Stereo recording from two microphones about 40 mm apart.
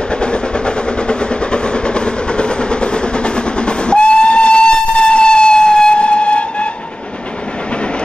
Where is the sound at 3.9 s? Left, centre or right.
Left.